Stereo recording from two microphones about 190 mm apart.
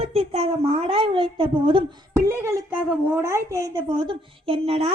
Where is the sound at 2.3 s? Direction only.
10° right (ahead or behind).